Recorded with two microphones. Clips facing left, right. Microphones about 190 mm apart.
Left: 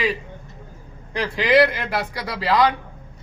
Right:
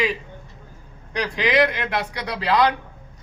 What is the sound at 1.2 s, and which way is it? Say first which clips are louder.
A man's voice: left 3 dB; centre (ahead or behind).